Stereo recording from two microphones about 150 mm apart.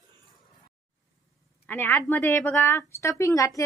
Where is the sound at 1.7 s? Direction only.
15° left (ahead or behind).